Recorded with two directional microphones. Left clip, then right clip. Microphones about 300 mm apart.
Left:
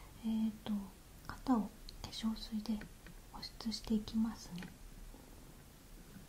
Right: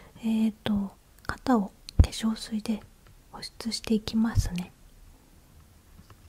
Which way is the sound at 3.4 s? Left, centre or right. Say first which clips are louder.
Right 10 dB; right.